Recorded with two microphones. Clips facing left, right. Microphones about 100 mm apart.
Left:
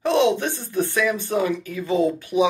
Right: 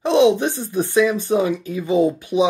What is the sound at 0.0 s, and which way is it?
Speech, 15° right (ahead or behind).